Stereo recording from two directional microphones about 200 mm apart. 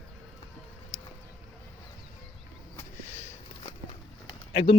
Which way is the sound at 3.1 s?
35° left (ahead or behind).